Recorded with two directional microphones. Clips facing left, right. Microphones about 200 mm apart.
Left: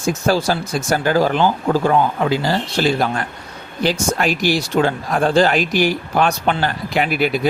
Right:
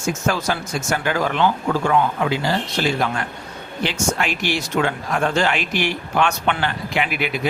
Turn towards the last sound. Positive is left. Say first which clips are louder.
# left 5 dB
turn(degrees=40)  # may be behind; listen again after turning